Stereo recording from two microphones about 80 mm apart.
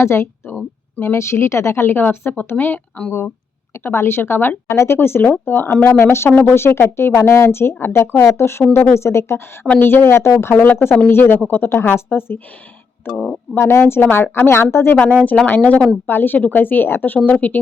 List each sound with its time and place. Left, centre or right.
0.0 s a woman's voice: left; by 3.1 s centre
3.8 s speech: left
10.5 s speech: left
15.4 s speech: left